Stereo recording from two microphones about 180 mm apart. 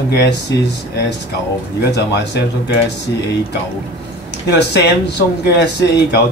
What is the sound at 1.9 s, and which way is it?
Speech, 70° left (ahead or behind).